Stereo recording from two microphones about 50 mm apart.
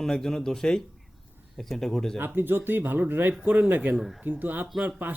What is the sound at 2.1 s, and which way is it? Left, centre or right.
Speech, right.